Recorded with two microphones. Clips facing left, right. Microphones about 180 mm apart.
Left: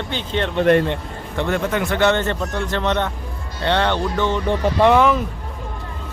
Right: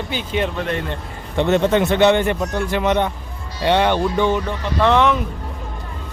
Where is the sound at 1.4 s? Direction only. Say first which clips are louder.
Right 5 dB; 25° right (ahead or behind).